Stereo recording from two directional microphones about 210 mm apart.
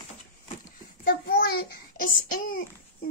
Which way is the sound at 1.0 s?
45° left (ahead or behind).